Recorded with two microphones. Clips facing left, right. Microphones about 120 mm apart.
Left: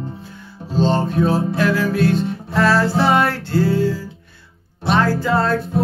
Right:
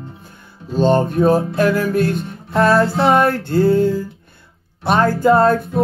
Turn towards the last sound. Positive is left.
turn(degrees=-45)  # may be behind; listen again after turning